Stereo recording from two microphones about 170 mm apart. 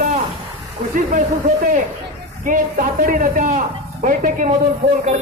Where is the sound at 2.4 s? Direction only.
50° right (ahead or behind).